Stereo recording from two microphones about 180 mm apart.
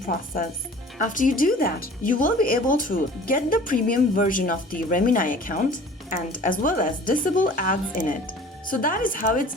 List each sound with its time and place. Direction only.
0.0 s speech: 50° left (ahead or behind)